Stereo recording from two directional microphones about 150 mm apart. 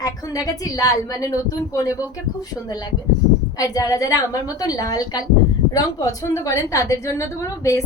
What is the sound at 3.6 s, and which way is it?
A woman's voice, 25° left (ahead or behind).